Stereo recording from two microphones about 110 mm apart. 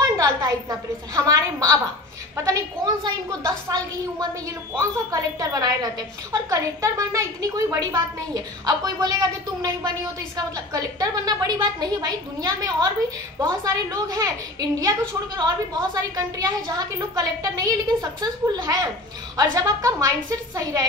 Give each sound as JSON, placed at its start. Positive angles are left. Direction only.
{"t": 0.0, "sound": "a woman's voice", "side_deg": -35}